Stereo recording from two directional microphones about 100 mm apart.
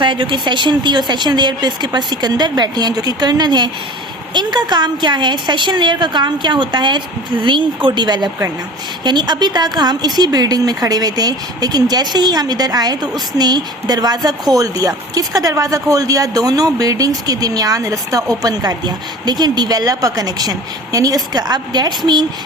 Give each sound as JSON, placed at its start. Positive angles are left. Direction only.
{"t": 0.0, "sound": "a woman's voice", "side_deg": -55}